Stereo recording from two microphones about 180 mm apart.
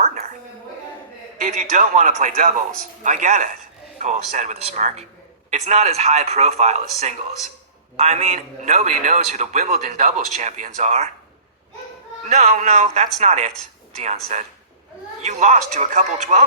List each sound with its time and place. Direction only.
0.0 s music: 45° right (ahead or behind)
1.5 s a man's voice: 40° right (ahead or behind)
12.2 s a man's voice: 40° right (ahead or behind)